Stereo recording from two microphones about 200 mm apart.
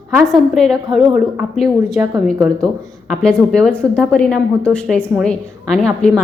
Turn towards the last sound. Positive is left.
turn(degrees=5)  # may be behind; listen again after turning